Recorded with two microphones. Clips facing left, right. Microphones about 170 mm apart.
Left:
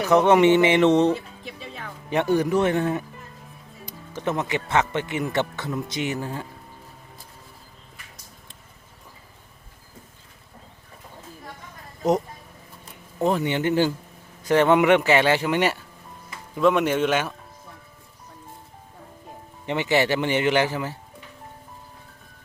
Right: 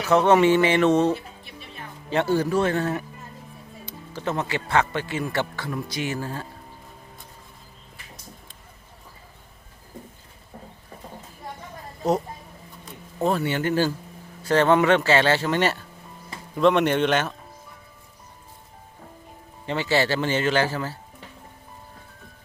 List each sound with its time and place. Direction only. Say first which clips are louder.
0.0 s speech: left 1 dB; 15° left (ahead or behind)
1.5 s music: left 4 dB; 90° left
2.0 s speech: left 1 dB; 15° left (ahead or behind)
4.1 s speech: left 1 dB; 20° left (ahead or behind)
13.2 s a man's voice: left 1 dB; 15° left (ahead or behind)
19.6 s speech: left 1 dB; 20° left (ahead or behind)